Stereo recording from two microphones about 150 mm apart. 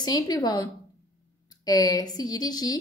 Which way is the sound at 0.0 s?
25° left (ahead or behind).